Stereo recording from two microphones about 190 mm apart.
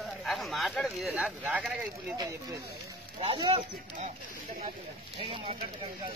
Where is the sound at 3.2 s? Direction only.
30° right (ahead or behind).